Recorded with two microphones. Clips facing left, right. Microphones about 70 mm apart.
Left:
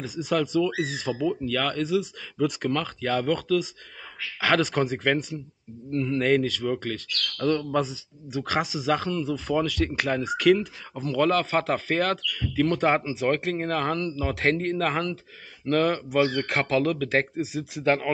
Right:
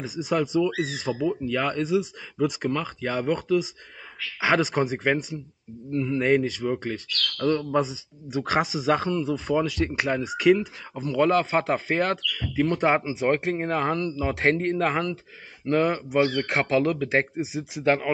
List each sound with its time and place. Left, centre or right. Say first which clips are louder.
0.0 s speech: even; centre
13.0 s speech: right 1 dB; right